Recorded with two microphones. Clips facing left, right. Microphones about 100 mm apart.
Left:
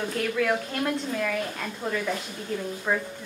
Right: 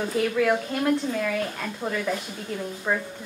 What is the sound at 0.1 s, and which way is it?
A woman's voice, 5° right (ahead or behind).